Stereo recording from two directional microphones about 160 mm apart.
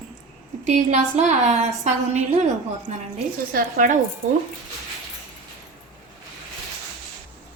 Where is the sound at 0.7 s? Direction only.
45° right (ahead or behind).